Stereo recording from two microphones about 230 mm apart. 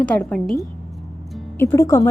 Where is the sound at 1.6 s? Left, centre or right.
Centre.